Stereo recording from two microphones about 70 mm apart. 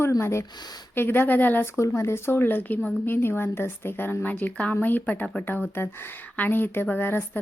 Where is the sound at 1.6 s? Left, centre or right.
Left.